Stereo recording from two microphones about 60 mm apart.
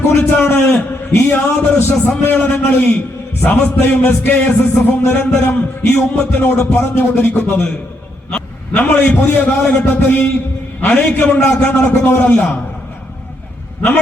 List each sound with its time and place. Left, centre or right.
0.1 s music: left
1.5 s a man's voice: left
3.4 s music: left
8.3 s a man's voice: left